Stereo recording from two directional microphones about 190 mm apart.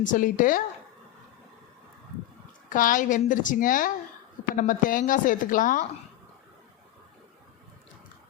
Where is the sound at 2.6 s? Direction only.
45° left (ahead or behind).